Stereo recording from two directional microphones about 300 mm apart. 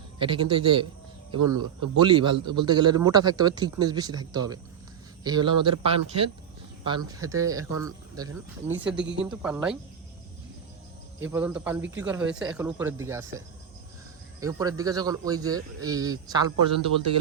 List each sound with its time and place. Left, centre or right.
0.2 s a man's voice: centre
1.4 s speech: right
2.0 s a man's voice: centre
11.2 s a man's voice: centre
14.4 s a man's voice: centre